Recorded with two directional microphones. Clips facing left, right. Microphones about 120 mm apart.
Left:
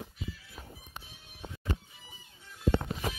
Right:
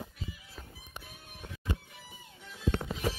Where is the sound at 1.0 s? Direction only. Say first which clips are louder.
Right 4 dB; 55° right (ahead or behind).